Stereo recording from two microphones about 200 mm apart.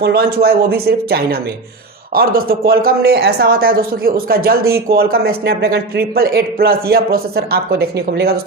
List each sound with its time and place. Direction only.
0.0 s speech: 50° right (ahead or behind)